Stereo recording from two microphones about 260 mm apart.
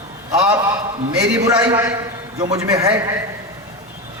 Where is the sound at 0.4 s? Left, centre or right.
Centre.